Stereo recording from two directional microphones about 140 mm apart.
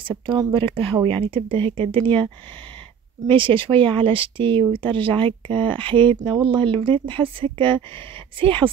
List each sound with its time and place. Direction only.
0.3 s speech: 35° right (ahead or behind)
3.3 s speech: 40° right (ahead or behind)